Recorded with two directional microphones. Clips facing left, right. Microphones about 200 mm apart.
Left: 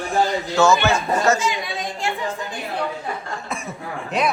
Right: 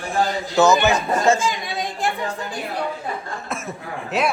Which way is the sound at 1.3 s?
30° right (ahead or behind).